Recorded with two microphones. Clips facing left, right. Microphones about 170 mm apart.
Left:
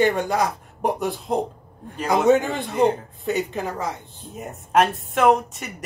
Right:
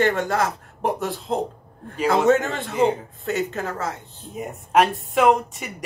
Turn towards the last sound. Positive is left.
turn(degrees=0)  # may be behind; listen again after turning